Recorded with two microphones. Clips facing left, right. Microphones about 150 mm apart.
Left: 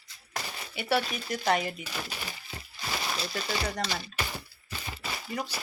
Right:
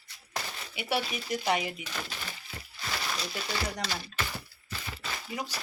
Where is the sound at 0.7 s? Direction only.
10° right (ahead or behind).